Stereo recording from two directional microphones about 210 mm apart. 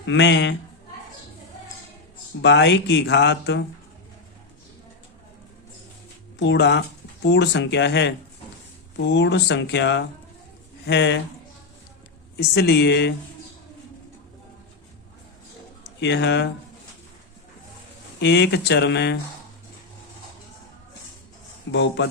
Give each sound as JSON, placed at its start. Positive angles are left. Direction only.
{"t": 0.0, "sound": "speech", "side_deg": 60}
{"t": 2.4, "sound": "speech", "side_deg": 55}
{"t": 6.4, "sound": "speech", "side_deg": 55}
{"t": 12.4, "sound": "speech", "side_deg": 50}
{"t": 16.0, "sound": "speech", "side_deg": 55}
{"t": 18.2, "sound": "speech", "side_deg": 55}
{"t": 21.7, "sound": "speech", "side_deg": 60}